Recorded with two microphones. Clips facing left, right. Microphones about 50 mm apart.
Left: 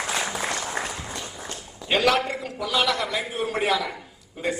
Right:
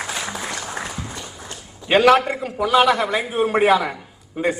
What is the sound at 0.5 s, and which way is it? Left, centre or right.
Applause, left.